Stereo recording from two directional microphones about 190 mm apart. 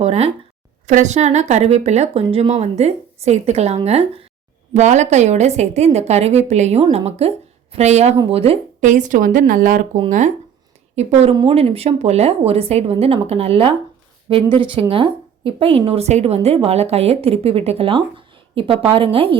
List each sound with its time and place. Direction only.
0.0 s a woman's voice: 35° right (ahead or behind)